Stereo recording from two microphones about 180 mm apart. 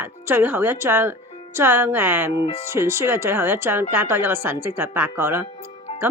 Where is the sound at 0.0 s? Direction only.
15° right (ahead or behind).